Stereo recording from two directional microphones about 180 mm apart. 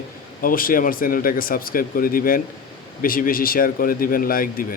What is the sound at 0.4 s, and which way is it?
Speech, 50° left (ahead or behind).